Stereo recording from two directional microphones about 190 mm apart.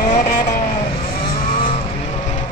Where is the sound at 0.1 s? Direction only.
40° left (ahead or behind).